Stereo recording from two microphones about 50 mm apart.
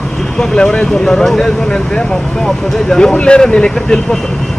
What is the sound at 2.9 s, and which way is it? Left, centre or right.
Speech, centre.